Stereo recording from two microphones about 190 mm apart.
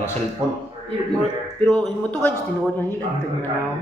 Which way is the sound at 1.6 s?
5° left (ahead or behind).